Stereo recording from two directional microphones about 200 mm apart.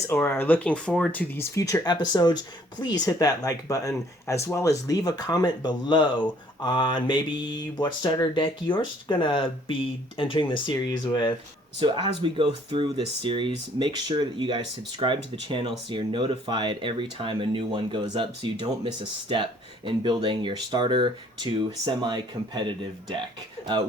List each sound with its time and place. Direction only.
0.1 s speech: 10° left (ahead or behind)
11.8 s speech: 25° right (ahead or behind)